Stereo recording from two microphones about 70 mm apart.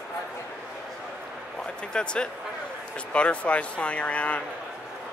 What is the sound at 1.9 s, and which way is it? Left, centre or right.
Speech, centre.